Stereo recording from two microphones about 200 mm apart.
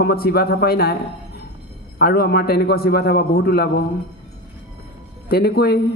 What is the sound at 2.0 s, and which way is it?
A man's voice, 50° left (ahead or behind).